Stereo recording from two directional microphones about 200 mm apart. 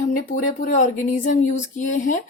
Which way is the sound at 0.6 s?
40° left (ahead or behind).